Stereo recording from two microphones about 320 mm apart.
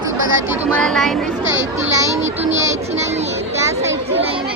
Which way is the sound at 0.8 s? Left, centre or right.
Centre.